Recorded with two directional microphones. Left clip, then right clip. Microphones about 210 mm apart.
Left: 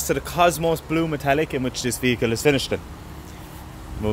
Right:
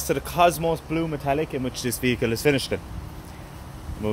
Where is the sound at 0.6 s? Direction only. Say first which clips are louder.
Left 3 dB; 20° left (ahead or behind).